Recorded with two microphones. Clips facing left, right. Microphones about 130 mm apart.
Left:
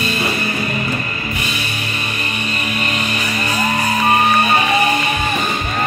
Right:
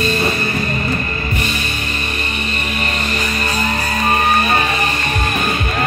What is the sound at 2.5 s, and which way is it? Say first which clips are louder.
Music: left 2 dB; 35° right (ahead or behind).